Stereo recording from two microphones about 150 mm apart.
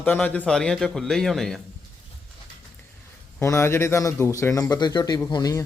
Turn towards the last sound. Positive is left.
turn(degrees=25)  # may be behind; listen again after turning